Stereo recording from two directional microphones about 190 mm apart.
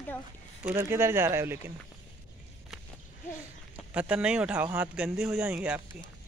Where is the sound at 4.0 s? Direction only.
5° right (ahead or behind).